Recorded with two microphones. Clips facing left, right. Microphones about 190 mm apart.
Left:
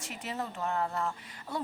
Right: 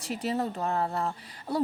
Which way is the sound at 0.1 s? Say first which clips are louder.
Right 8 dB; 35° right (ahead or behind).